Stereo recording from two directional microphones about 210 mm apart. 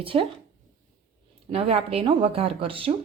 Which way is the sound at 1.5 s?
30° right (ahead or behind).